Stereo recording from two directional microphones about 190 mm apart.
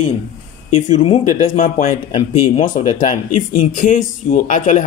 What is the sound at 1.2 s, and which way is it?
Speech, 45° left (ahead or behind).